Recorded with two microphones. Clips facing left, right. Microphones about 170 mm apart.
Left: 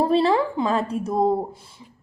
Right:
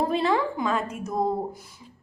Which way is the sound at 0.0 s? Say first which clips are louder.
Left 5 dB; 30° left (ahead or behind).